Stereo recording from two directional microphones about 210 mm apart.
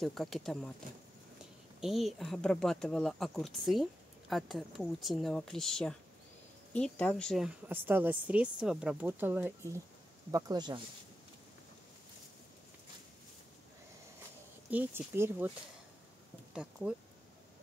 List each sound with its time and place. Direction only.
0.0 s speech: centre (ahead or behind)
1.8 s a woman's voice: centre (ahead or behind); by 10.8 s 20° right (ahead or behind)
14.7 s a woman's voice: 10° right (ahead or behind)